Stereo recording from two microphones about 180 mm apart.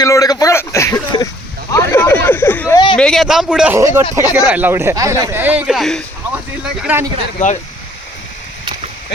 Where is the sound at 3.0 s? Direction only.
Centre (ahead or behind).